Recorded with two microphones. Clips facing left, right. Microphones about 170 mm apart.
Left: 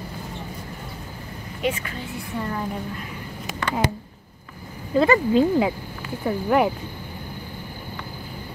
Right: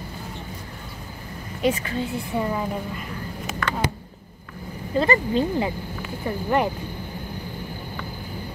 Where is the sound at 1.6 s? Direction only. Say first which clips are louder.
Right 3 dB; 35° right (ahead or behind).